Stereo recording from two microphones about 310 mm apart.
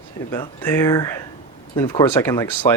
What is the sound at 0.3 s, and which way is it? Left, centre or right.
Speech, centre.